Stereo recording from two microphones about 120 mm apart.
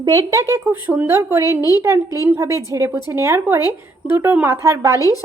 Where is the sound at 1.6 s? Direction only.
30° left (ahead or behind).